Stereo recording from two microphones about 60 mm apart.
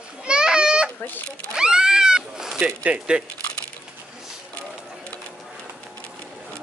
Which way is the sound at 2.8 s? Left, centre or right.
Centre.